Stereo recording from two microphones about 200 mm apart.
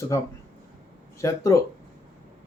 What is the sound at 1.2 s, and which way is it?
Speech, 15° left (ahead or behind).